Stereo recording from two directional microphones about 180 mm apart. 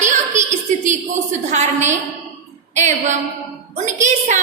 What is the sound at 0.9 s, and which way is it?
A woman's voice, 40° right (ahead or behind).